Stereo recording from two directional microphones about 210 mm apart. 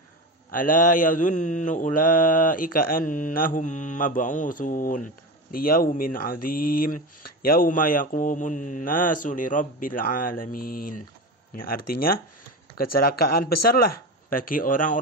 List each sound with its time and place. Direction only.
0.5 s speech: 40° left (ahead or behind)
12.7 s speech: 45° left (ahead or behind)